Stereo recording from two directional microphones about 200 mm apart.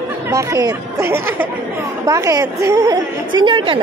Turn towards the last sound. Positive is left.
turn(degrees=-25)  # may be behind; listen again after turning